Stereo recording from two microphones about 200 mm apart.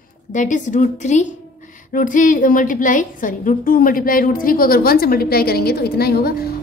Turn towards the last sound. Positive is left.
turn(degrees=50)  # may be behind; listen again after turning